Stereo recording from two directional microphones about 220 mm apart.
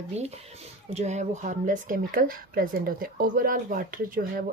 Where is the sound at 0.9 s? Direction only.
30° right (ahead or behind).